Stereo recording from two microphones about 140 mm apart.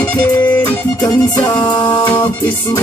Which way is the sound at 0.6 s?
30° left (ahead or behind).